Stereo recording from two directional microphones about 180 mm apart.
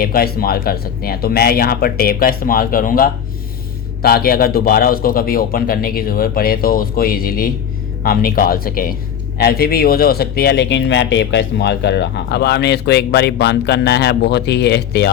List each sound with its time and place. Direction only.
0.0 s a man's voice: 55° left (ahead or behind)